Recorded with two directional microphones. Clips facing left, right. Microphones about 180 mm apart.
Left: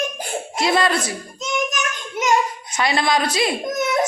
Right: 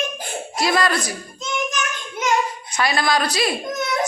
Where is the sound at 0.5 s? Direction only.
25° left (ahead or behind).